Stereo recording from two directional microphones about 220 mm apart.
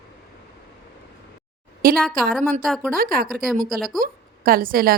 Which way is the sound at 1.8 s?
40° right (ahead or behind).